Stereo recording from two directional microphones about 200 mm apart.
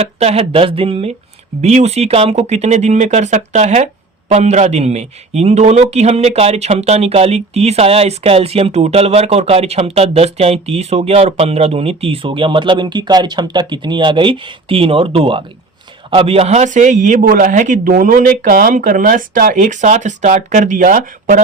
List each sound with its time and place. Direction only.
0.0 s a man's voice: 30° right (ahead or behind)